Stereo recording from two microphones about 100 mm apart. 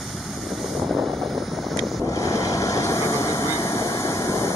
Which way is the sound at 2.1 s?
35° left (ahead or behind).